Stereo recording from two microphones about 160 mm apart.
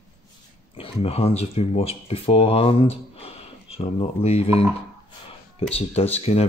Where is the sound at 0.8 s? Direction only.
40° left (ahead or behind).